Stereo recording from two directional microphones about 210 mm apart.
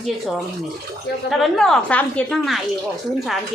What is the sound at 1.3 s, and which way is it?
A woman's voice, centre (ahead or behind).